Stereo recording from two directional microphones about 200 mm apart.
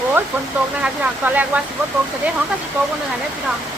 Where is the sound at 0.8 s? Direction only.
10° right (ahead or behind).